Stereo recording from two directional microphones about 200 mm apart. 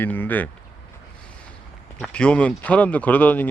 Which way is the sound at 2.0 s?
5° left (ahead or behind).